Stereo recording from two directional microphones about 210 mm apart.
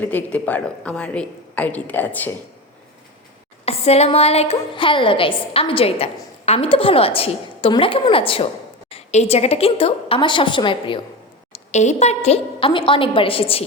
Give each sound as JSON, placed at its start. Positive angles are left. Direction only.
{"t": 0.0, "sound": "a woman's voice", "side_deg": 10}
{"t": 3.7, "sound": "a woman's voice", "side_deg": 30}